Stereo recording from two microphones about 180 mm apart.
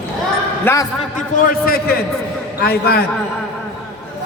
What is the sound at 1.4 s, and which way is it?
A man's voice, 50° left (ahead or behind).